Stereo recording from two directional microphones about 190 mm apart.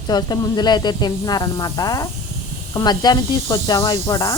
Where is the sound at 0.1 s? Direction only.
20° left (ahead or behind).